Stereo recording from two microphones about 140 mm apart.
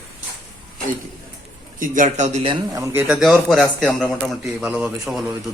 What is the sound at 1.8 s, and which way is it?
Speech, 70° right (ahead or behind).